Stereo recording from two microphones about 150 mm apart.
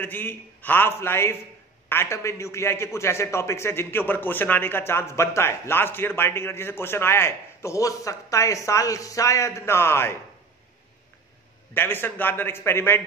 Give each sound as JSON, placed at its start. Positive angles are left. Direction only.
{"t": 0.0, "sound": "a man's voice", "side_deg": 15}
{"t": 11.7, "sound": "a man's voice", "side_deg": 15}